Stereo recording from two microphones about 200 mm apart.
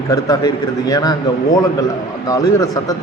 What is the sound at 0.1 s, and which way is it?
A man's voice, 20° left (ahead or behind).